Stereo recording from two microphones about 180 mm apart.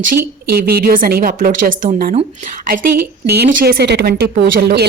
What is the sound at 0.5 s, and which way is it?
A woman's voice, 60° right (ahead or behind).